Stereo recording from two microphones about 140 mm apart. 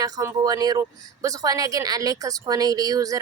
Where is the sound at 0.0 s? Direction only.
25° right (ahead or behind).